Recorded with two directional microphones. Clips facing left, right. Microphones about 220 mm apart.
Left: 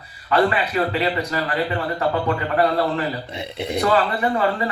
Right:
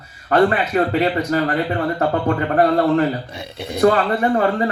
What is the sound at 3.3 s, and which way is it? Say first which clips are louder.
Speech: left 2 dB; 20° left (ahead or behind).